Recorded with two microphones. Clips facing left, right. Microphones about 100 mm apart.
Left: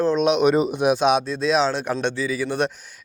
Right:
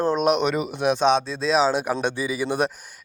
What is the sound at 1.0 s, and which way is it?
Speech, 5° left (ahead or behind).